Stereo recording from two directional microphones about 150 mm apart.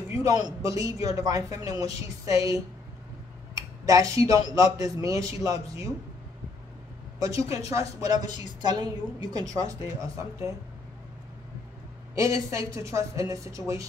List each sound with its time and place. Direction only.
0.1 s a man's voice: 25° right (ahead or behind)
3.5 s a sound: 25° right (ahead or behind)
4.6 s a woman's voice: 25° right (ahead or behind)
7.2 s a woman's voice: 20° right (ahead or behind)
12.2 s a woman's voice: 20° right (ahead or behind)